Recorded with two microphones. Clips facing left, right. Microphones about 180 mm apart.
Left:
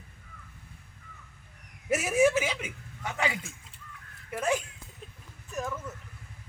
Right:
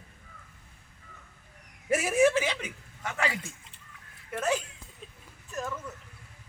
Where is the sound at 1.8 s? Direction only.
5° left (ahead or behind).